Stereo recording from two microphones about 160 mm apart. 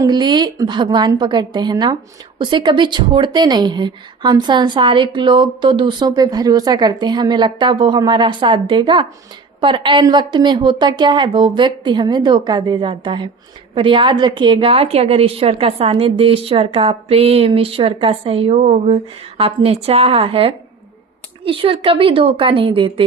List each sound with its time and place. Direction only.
0.0 s a woman's voice: 25° right (ahead or behind)